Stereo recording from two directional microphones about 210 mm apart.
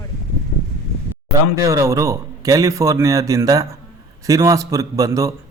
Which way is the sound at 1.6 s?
15° right (ahead or behind).